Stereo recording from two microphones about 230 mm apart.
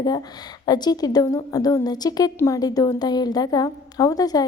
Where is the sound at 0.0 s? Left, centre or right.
Centre.